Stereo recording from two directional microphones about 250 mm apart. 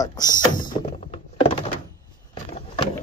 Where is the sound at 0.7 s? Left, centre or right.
Left.